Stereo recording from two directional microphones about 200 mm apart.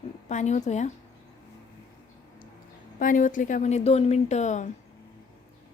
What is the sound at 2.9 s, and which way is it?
A woman's voice, 40° left (ahead or behind).